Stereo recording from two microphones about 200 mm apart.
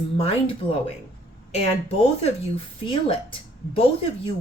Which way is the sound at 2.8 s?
25° left (ahead or behind).